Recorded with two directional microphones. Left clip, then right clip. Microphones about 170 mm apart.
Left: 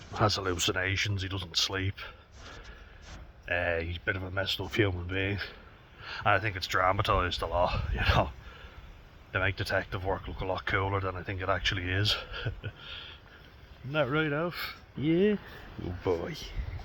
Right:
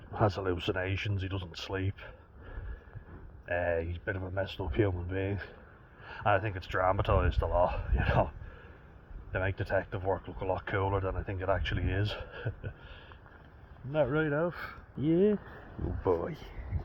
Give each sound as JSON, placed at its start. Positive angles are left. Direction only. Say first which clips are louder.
{"t": 0.1, "sound": "speech", "louder": "left 2 dB", "side_deg": 15}
{"t": 3.4, "sound": "speech", "louder": "left 1 dB", "side_deg": 20}
{"t": 9.3, "sound": "speech", "louder": "left 2 dB", "side_deg": 25}